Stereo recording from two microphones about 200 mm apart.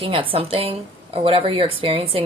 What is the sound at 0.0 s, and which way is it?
A woman's voice, 25° right (ahead or behind).